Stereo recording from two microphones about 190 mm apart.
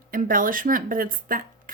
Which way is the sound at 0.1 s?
45° right (ahead or behind).